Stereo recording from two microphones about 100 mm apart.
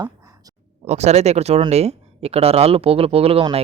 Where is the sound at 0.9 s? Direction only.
90° right.